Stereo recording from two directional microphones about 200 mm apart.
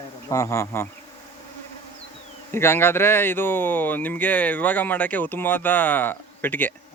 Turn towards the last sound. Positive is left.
turn(degrees=10)  # may be behind; listen again after turning